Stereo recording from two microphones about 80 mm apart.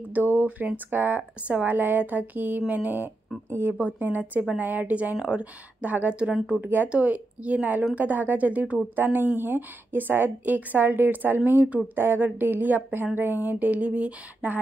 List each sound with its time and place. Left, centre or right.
0.1 s a woman's voice: right
6.6 s a woman's voice: right